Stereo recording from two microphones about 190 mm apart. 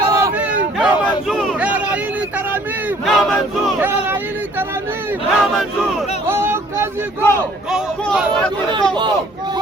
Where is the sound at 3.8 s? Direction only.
10° right (ahead or behind).